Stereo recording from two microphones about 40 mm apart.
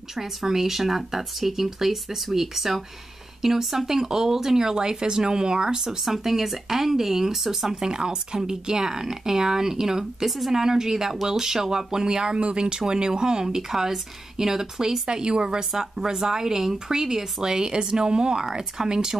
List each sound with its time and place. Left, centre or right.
0.1 s speech: centre
5.9 s speech: centre
7.8 s speech: centre